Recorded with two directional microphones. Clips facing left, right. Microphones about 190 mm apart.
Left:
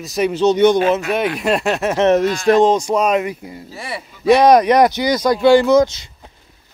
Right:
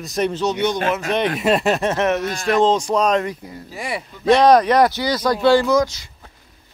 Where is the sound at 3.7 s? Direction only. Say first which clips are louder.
Right 3 dB; 15° right (ahead or behind).